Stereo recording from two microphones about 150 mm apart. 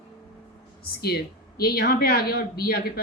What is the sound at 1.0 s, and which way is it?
Speech, 90° left.